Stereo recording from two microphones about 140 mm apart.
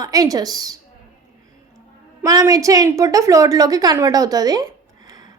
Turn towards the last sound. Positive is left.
turn(degrees=-25)  # may be behind; listen again after turning